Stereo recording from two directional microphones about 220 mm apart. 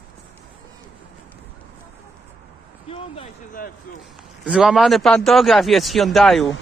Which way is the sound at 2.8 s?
25° left (ahead or behind).